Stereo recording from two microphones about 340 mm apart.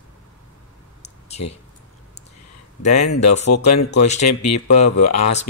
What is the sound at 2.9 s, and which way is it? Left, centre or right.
Speech, left.